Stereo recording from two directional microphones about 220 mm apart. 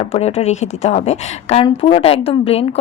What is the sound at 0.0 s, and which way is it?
A woman's voice, 25° left (ahead or behind).